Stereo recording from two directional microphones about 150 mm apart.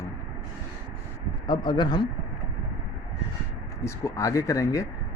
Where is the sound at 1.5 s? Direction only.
30° left (ahead or behind).